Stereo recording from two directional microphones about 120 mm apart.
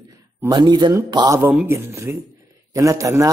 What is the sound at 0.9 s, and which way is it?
A man's voice, 30° right (ahead or behind).